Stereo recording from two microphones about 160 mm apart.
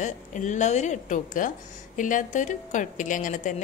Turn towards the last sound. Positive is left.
turn(degrees=55)  # may be behind; listen again after turning